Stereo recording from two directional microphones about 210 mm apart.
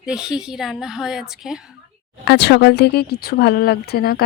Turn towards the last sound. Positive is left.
turn(degrees=45)  # may be behind; listen again after turning